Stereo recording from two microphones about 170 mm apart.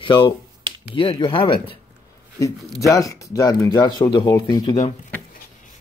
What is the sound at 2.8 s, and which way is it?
Speech, 20° left (ahead or behind).